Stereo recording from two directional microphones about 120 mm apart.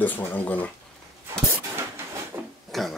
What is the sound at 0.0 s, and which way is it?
Speech, 15° left (ahead or behind).